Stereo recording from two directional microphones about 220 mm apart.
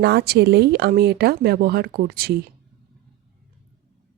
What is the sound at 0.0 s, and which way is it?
Speech, 50° right (ahead or behind).